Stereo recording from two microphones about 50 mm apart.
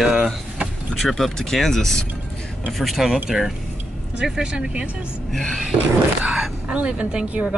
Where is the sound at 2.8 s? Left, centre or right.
Centre.